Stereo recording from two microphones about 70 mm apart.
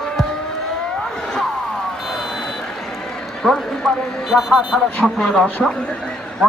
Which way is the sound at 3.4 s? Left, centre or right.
Centre.